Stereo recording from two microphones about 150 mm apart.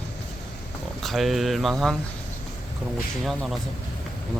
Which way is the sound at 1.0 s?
Centre (ahead or behind).